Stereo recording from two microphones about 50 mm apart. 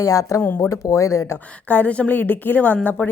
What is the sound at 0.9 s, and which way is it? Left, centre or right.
Speech, left.